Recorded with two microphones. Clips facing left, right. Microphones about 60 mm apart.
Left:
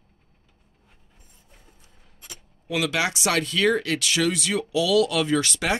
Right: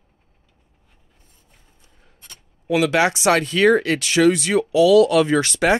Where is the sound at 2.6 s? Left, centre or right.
Right.